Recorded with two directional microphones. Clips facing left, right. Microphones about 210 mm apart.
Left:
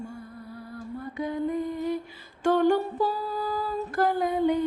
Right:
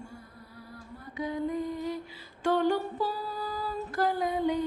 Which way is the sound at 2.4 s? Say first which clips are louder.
Left 4 dB; 50° left (ahead or behind).